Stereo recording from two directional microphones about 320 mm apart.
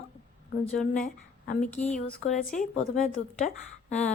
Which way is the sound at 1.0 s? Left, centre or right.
Left.